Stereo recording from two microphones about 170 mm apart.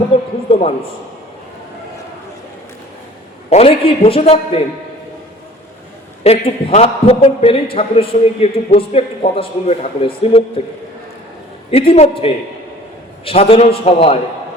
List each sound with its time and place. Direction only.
3.5 s a man's voice: 35° left (ahead or behind)
6.2 s a man's voice: 35° left (ahead or behind)
11.7 s a man's voice: 35° left (ahead or behind)